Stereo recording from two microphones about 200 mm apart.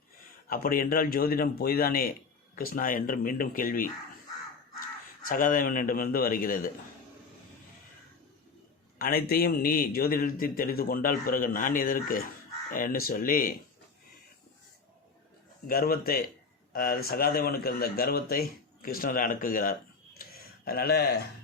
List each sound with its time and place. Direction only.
0.4 s a man's voice: 45° left (ahead or behind)
5.2 s a man's voice: 45° left (ahead or behind)
9.0 s a man's voice: 45° left (ahead or behind)
15.6 s a man's voice: 45° left (ahead or behind)